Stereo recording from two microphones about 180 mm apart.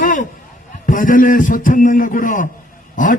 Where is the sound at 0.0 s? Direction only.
45° left (ahead or behind).